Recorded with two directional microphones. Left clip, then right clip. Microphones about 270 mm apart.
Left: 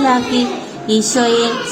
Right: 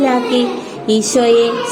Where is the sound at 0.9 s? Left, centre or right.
Centre.